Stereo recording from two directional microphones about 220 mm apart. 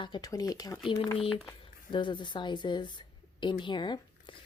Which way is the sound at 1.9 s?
20° left (ahead or behind).